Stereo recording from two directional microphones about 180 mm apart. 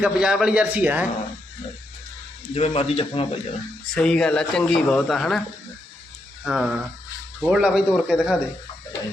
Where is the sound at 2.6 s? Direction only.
35° left (ahead or behind).